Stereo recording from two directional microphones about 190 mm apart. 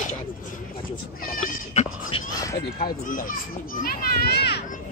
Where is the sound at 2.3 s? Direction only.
15° left (ahead or behind).